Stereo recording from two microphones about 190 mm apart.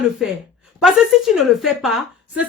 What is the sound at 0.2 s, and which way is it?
A woman's voice, centre (ahead or behind).